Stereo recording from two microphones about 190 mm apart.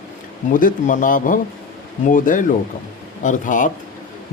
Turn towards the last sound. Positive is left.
turn(degrees=45)  # may be behind; listen again after turning